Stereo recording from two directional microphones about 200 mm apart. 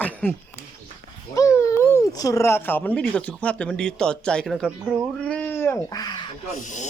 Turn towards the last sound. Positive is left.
turn(degrees=40)  # may be behind; listen again after turning